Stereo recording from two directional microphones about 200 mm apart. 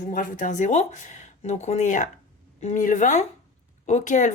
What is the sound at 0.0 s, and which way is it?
Speech, 40° left (ahead or behind).